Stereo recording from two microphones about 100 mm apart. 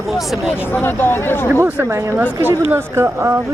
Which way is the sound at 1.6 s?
15° right (ahead or behind).